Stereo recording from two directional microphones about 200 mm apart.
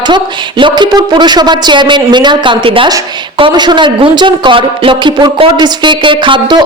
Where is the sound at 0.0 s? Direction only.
25° right (ahead or behind).